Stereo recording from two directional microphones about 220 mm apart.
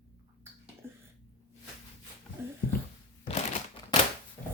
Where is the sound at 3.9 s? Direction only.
20° left (ahead or behind).